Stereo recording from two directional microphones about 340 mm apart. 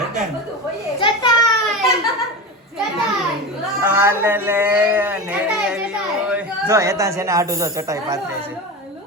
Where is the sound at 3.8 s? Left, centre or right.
Centre.